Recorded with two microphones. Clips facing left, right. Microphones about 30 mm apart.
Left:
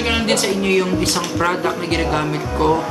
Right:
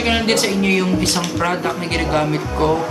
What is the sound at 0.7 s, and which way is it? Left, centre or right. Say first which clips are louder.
Speech: even; centre.